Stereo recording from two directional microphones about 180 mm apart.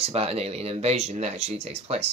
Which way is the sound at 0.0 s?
35° right (ahead or behind).